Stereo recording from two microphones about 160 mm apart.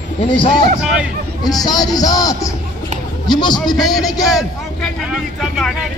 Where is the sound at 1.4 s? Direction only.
25° left (ahead or behind).